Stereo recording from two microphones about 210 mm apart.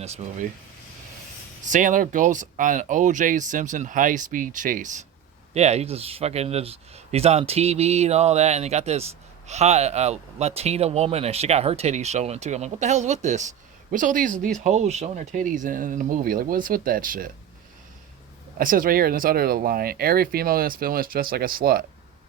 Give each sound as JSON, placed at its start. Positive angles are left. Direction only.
{"t": 0.0, "sound": "speech", "side_deg": -30}
{"t": 1.6, "sound": "speech", "side_deg": -35}
{"t": 18.5, "sound": "speech", "side_deg": -40}